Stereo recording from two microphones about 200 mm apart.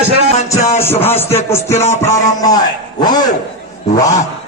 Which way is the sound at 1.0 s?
10° left (ahead or behind).